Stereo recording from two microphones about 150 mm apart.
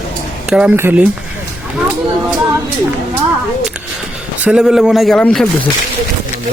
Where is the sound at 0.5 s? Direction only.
5° right (ahead or behind).